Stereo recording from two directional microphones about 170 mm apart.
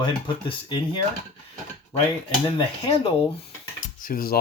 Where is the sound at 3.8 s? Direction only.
55° left (ahead or behind).